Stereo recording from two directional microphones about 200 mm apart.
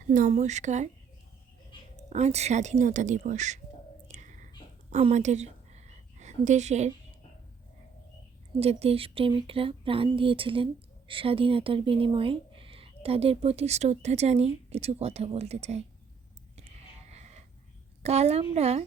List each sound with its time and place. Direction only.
0.1 s speech: 40° right (ahead or behind)
2.0 s speech: 35° right (ahead or behind)
4.1 s whispering: 40° right (ahead or behind)
4.9 s a sound: 35° right (ahead or behind)
8.5 s speech: 30° right (ahead or behind)
16.6 s a sound: 30° right (ahead or behind)
18.0 s speech: 30° right (ahead or behind)